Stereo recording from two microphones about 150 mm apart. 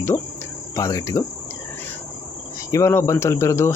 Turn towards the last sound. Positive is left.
turn(degrees=20)  # may be behind; listen again after turning